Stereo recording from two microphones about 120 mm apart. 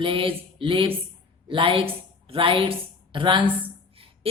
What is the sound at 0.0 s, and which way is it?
Speech, 45° right (ahead or behind).